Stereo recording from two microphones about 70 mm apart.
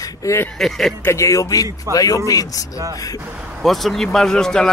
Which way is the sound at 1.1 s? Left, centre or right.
Left.